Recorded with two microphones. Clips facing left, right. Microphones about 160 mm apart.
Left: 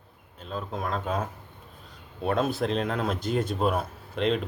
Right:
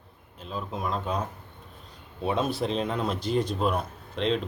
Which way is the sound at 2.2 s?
Centre (ahead or behind).